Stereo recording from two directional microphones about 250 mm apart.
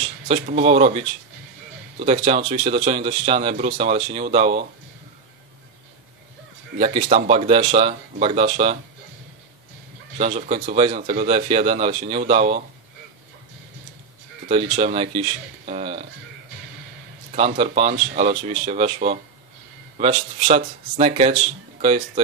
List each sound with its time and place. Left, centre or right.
0.3 s speech: right
6.8 s speech: right
10.1 s speech: right
14.5 s speech: right
17.3 s speech: right